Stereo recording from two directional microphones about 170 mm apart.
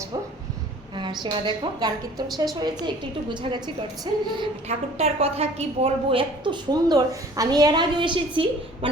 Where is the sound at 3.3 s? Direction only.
25° right (ahead or behind).